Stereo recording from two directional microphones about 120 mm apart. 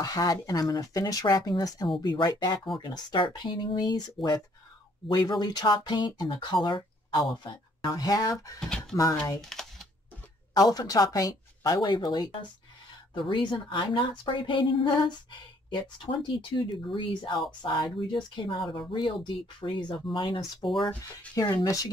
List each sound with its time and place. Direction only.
0.0 s speech: 35° left (ahead or behind)
8.5 s speech: 5° left (ahead or behind)
9.4 s a sound: 5° left (ahead or behind)
10.5 s a woman's voice: 30° left (ahead or behind)
16.3 s a woman's voice: 45° left (ahead or behind)
20.7 s speech: 5° left (ahead or behind)